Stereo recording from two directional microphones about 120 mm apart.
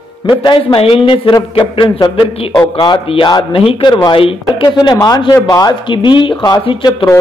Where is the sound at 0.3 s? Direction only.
40° left (ahead or behind).